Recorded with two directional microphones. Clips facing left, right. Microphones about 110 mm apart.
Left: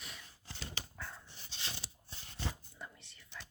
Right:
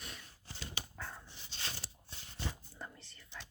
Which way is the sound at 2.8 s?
30° right (ahead or behind).